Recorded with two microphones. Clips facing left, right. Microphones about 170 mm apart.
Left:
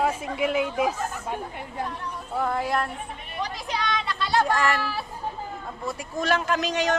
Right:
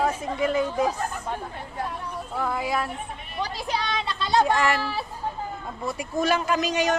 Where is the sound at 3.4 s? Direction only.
30° right (ahead or behind).